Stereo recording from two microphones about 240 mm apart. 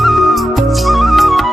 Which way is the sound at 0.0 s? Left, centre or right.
Centre.